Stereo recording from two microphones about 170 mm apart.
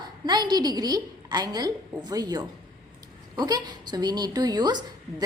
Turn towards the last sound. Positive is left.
turn(degrees=-25)  # may be behind; listen again after turning